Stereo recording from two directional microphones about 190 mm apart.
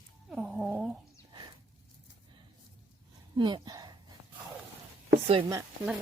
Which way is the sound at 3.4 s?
25° right (ahead or behind).